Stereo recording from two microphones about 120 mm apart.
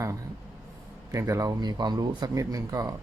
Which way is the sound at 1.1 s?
25° right (ahead or behind).